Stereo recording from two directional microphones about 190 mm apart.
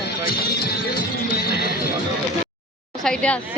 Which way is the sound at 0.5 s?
55° left (ahead or behind).